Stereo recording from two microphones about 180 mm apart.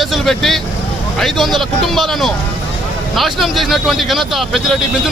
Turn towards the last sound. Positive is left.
turn(degrees=0)  # may be behind; listen again after turning